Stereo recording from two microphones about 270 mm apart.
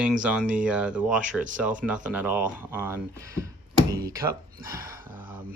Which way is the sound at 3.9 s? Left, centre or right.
Centre.